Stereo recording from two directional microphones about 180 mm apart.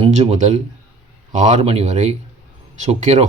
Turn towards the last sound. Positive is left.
turn(degrees=-40)  # may be behind; listen again after turning